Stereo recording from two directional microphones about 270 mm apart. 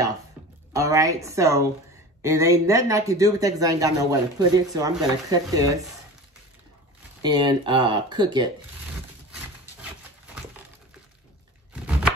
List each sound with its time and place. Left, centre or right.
0.7 s a man's voice: centre
7.2 s a man's voice: centre
11.7 s a sound: centre